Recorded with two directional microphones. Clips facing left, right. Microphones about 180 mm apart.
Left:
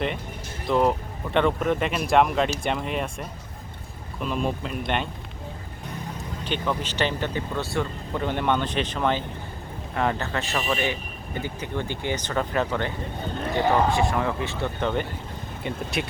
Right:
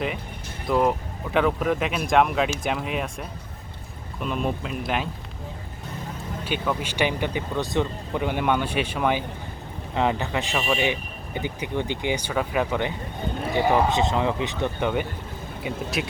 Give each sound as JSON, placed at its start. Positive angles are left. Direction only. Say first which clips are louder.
{"t": 0.7, "sound": "speech", "louder": "even", "side_deg": -5}
{"t": 6.4, "sound": "speech", "louder": "even", "side_deg": -10}